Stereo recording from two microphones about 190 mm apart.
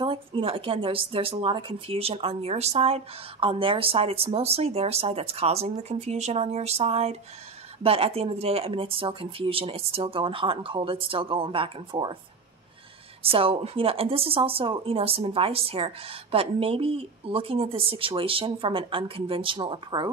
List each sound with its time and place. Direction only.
0.0 s speech: 25° right (ahead or behind)
13.2 s speech: 30° right (ahead or behind)